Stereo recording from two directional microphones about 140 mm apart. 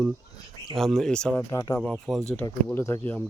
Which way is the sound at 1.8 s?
5° left (ahead or behind).